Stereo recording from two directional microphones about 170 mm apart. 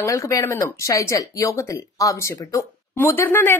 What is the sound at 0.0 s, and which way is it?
Speech, 20° left (ahead or behind).